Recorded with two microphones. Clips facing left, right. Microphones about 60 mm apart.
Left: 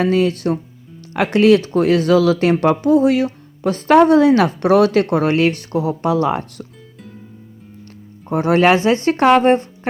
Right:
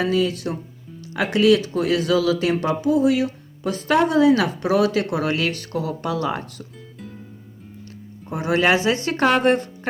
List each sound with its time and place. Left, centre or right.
0.0 s speech: left
8.3 s speech: left